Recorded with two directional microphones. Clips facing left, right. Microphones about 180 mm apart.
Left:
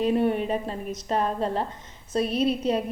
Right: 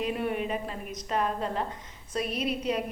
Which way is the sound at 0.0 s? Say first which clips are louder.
Left 7 dB; 30° left (ahead or behind).